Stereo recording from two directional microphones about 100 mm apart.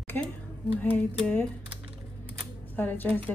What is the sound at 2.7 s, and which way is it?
Speech, 20° left (ahead or behind).